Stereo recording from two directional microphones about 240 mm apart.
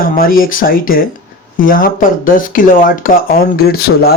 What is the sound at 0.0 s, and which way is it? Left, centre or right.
Speech, left.